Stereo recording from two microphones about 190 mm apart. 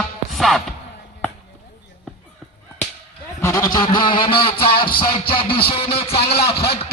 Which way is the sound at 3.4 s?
20° left (ahead or behind).